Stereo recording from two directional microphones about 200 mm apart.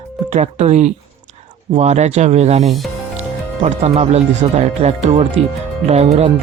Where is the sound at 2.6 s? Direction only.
Centre (ahead or behind).